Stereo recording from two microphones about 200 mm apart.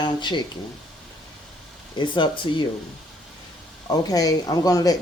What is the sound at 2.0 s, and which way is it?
Speech, 25° left (ahead or behind).